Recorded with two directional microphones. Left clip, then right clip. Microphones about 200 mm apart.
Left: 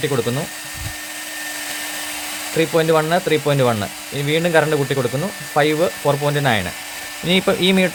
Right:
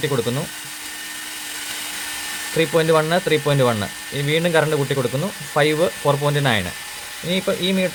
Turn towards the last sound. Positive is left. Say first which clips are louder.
# left 4 dB
turn(degrees=25)  # may be behind; listen again after turning